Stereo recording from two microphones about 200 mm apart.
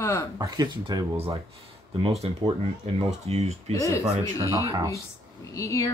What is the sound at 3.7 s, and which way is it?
Speech, 15° left (ahead or behind).